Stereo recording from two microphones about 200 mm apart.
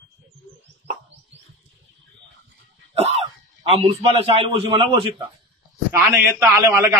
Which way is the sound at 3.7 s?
30° right (ahead or behind).